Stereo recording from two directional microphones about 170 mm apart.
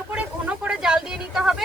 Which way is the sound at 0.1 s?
5° right (ahead or behind).